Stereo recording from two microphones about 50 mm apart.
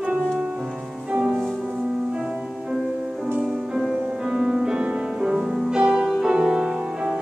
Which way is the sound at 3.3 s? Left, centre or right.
Centre.